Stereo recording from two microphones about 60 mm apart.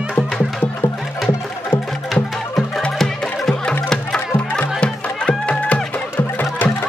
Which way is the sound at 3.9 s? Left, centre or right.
Centre.